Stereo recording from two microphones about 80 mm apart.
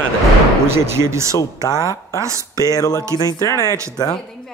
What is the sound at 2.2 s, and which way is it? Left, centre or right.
Speech, right.